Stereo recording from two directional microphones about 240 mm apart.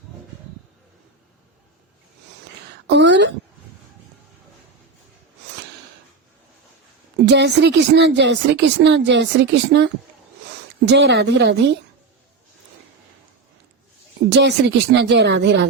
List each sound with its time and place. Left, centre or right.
2.8 s speech: right
7.3 s speech: right
14.3 s speech: right